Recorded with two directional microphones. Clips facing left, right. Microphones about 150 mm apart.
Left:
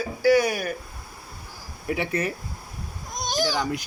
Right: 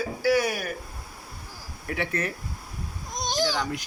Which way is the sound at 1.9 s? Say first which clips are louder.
Left 3 dB; 10° left (ahead or behind).